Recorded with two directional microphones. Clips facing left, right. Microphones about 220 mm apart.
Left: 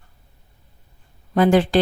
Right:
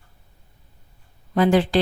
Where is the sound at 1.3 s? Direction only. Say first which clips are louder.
Left 2 dB; 50° left (ahead or behind).